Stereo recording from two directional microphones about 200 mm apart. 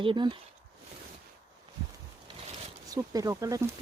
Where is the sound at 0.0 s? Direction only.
25° right (ahead or behind).